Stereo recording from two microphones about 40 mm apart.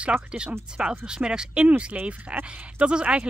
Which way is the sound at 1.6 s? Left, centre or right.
Right.